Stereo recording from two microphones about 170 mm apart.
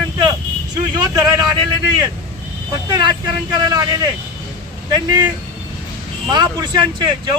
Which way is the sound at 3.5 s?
20° right (ahead or behind).